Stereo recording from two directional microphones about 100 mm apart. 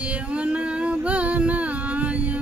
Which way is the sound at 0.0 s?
15° right (ahead or behind).